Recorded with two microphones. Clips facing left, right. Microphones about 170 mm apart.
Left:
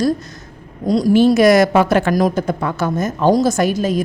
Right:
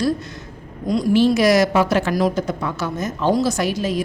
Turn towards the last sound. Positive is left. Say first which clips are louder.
# left 4 dB
turn(degrees=45)  # may be behind; listen again after turning